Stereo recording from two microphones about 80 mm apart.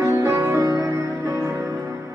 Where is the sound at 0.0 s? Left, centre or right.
Right.